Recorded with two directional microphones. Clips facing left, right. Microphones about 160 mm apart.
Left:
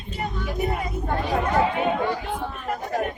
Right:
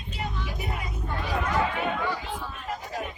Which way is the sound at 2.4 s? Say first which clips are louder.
Left 6 dB; 60° left (ahead or behind).